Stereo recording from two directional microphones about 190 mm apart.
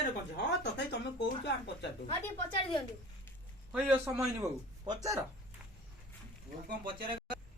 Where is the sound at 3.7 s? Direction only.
10° right (ahead or behind).